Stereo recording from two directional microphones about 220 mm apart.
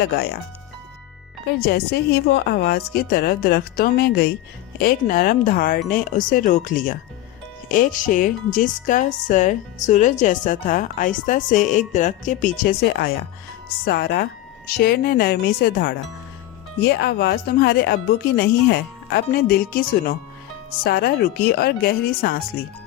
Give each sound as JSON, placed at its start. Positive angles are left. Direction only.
{"t": 0.0, "sound": "a woman's voice", "side_deg": 45}
{"t": 1.5, "sound": "a woman's voice", "side_deg": 45}